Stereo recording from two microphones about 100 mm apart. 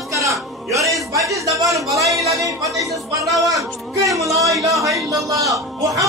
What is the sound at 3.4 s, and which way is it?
A man's voice, 35° right (ahead or behind).